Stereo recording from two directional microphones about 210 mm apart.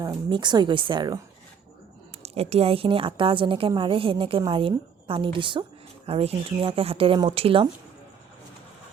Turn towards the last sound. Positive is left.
turn(degrees=-25)  # may be behind; listen again after turning